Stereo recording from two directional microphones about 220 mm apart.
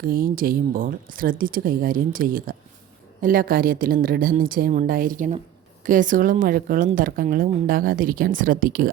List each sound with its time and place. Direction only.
0.0 s a woman's voice: 40° right (ahead or behind)